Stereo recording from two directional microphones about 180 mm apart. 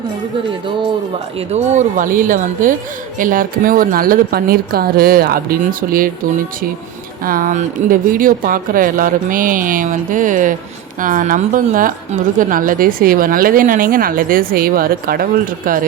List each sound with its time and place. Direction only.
1.5 s a woman's voice: 40° right (ahead or behind)
7.3 s a woman's voice: 50° right (ahead or behind)